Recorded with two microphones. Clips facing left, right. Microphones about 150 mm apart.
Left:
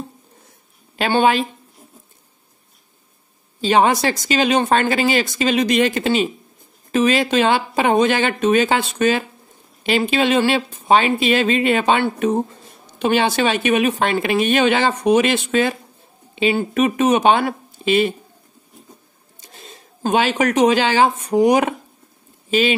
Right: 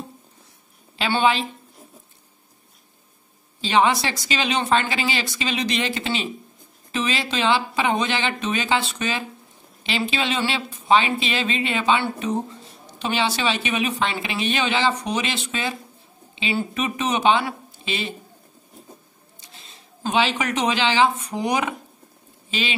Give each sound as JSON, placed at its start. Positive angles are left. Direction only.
{"t": 0.9, "sound": "speech", "side_deg": 50}
{"t": 3.6, "sound": "speech", "side_deg": 45}
{"t": 19.4, "sound": "speech", "side_deg": 50}